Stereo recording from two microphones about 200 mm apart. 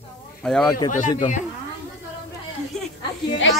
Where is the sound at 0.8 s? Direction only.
40° left (ahead or behind).